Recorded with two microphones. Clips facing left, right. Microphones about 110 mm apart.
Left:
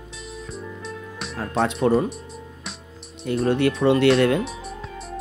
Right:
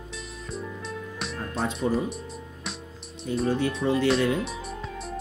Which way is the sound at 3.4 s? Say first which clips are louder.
Left 6 dB; 70° left (ahead or behind).